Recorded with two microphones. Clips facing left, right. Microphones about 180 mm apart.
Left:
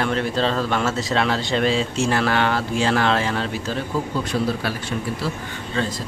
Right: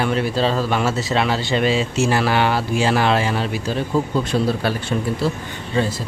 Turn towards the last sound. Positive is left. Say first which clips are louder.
# right 4 dB
turn(degrees=-10)  # may be behind; listen again after turning